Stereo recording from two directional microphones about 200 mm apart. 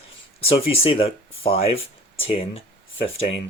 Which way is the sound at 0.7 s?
30° left (ahead or behind).